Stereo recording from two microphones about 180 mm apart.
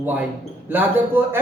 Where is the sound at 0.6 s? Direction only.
10° right (ahead or behind).